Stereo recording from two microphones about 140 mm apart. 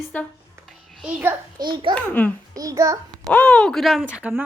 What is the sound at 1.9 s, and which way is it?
Speech, 10° left (ahead or behind).